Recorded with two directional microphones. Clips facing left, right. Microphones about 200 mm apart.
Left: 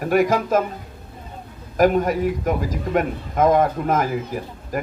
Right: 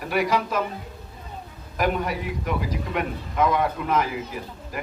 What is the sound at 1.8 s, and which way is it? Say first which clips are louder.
A man's voice: left 8 dB; 45° left (ahead or behind).